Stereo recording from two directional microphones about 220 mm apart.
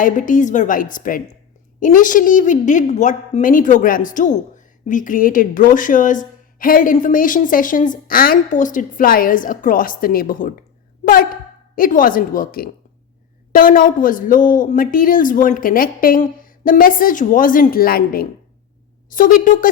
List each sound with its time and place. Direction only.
0.0 s a woman's voice: 35° left (ahead or behind)
11.0 s a sound: 40° left (ahead or behind)
11.7 s a woman's voice: 40° left (ahead or behind)